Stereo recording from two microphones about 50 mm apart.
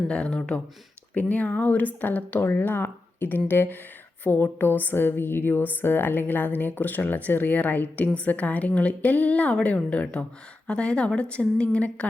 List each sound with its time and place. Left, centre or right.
0.1 s speech: centre
1.1 s a woman's voice: left